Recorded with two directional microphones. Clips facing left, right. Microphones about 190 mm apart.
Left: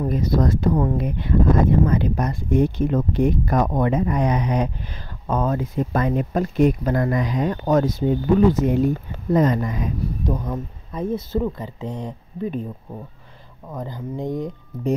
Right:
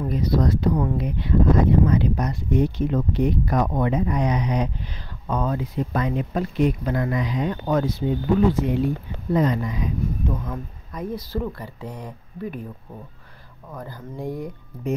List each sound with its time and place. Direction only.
0.0 s speech: 45° left (ahead or behind)
10.4 s speech: 25° left (ahead or behind)
13.7 s speech: 20° left (ahead or behind)